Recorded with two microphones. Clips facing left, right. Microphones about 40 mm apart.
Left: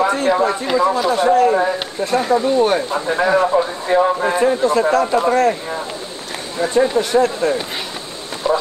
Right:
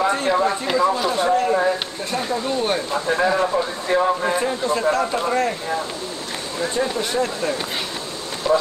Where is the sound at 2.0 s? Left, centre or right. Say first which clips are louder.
Left 8 dB; left.